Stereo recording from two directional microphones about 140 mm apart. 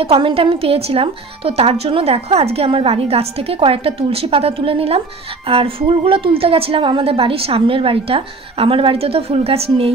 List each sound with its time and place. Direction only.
0.0 s a woman's voice: 40° right (ahead or behind)